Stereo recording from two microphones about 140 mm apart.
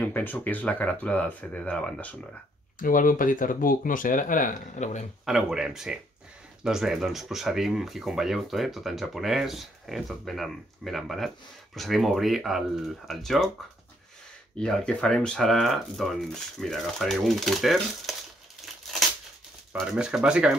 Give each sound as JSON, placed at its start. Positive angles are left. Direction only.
{"t": 0.0, "sound": "speech", "side_deg": 15}
{"t": 2.8, "sound": "speech", "side_deg": 75}
{"t": 5.2, "sound": "speech", "side_deg": -5}
{"t": 14.6, "sound": "speech", "side_deg": 5}
{"t": 19.7, "sound": "speech", "side_deg": -5}